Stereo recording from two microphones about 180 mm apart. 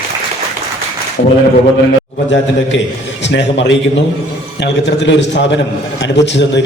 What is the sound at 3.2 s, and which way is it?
A man's voice, 80° left.